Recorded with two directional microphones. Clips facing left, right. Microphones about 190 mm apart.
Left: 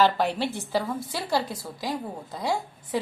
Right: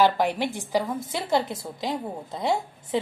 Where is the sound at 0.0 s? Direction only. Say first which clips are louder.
Right 1 dB; 15° right (ahead or behind).